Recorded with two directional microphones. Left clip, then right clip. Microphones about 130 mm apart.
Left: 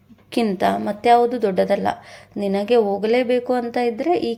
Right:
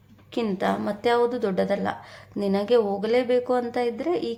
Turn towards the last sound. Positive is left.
turn(degrees=20)  # may be behind; listen again after turning